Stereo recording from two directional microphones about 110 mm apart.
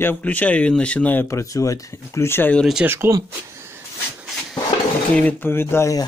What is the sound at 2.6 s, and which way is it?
Speech, centre (ahead or behind).